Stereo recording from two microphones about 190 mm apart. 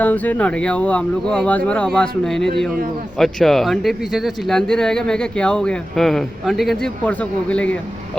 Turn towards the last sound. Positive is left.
turn(degrees=5)  # may be behind; listen again after turning